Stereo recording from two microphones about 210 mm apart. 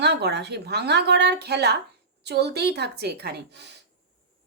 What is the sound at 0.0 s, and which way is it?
A woman's voice, 55° right (ahead or behind).